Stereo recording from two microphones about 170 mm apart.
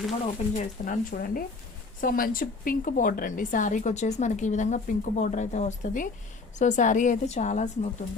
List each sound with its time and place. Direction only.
0.5 s a woman's voice: 55° left (ahead or behind)